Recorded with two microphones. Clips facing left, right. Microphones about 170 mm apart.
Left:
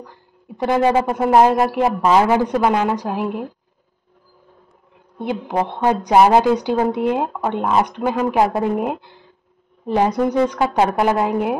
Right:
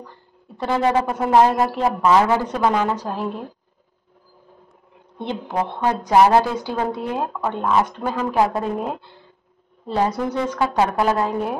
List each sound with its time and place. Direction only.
0.0 s speech: 15° left (ahead or behind)
5.2 s speech: 20° left (ahead or behind)